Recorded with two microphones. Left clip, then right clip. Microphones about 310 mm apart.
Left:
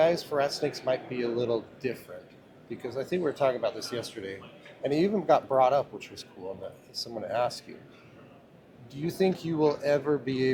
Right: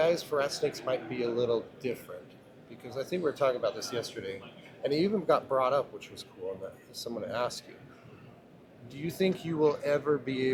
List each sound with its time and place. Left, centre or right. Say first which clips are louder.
0.0 s speech: left 3 dB; left
8.9 s speech: left 3 dB; left